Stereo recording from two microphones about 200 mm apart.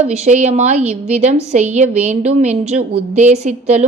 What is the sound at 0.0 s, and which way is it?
A woman's voice, 35° right (ahead or behind).